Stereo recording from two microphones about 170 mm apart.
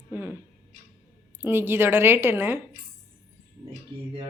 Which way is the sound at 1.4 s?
15° right (ahead or behind).